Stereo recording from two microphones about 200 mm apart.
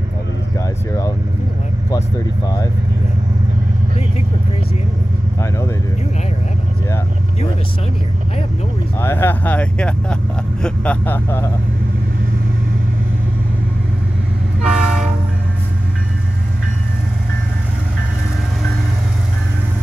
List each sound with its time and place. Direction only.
1.9 s speech: 20° left (ahead or behind)
9.0 s speech: 10° left (ahead or behind)
14.6 s train: 5° right (ahead or behind)